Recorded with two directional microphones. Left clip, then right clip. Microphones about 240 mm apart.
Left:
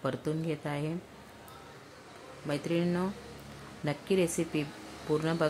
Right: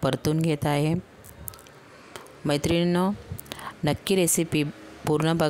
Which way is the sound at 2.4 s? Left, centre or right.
Right.